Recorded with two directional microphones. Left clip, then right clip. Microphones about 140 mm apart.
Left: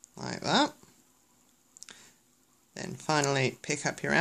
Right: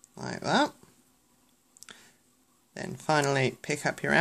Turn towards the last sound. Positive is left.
turn(degrees=-15)  # may be behind; listen again after turning